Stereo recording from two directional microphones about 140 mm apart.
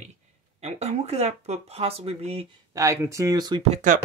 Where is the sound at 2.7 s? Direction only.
20° right (ahead or behind).